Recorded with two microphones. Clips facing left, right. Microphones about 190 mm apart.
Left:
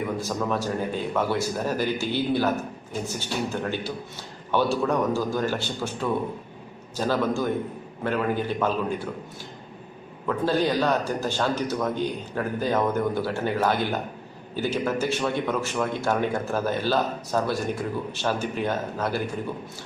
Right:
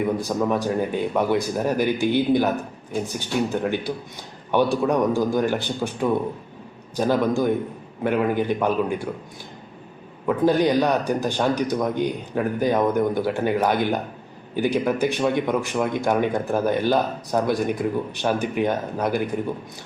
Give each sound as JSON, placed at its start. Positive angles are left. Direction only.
{"t": 0.2, "sound": "speech", "side_deg": -15}
{"t": 10.2, "sound": "speech", "side_deg": -15}